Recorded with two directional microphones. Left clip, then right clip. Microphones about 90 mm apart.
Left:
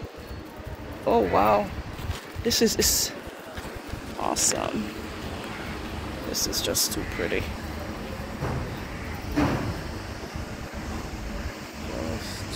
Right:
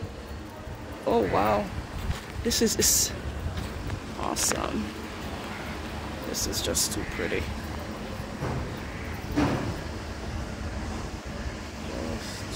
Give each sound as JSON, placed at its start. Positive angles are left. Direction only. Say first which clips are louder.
{"t": 1.0, "sound": "speech", "louder": "left 3 dB", "side_deg": 0}
{"t": 2.4, "sound": "speech", "louder": "left 2 dB", "side_deg": -20}
{"t": 4.2, "sound": "speech", "louder": "left 3 dB", "side_deg": -15}
{"t": 6.4, "sound": "speech", "louder": "left 2 dB", "side_deg": -5}
{"t": 9.3, "sound": "a sound", "louder": "left 1 dB", "side_deg": 0}
{"t": 11.9, "sound": "vehicle", "louder": "left 2 dB", "side_deg": -20}